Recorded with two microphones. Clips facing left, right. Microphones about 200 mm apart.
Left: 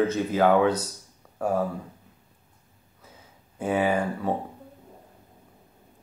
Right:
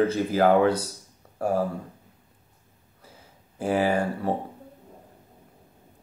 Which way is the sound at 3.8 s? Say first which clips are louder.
Even; 30° right (ahead or behind).